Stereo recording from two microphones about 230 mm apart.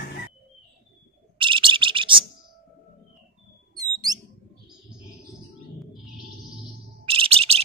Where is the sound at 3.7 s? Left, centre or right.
Centre.